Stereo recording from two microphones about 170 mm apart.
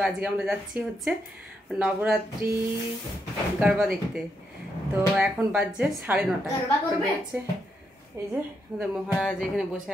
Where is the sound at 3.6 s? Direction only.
Centre (ahead or behind).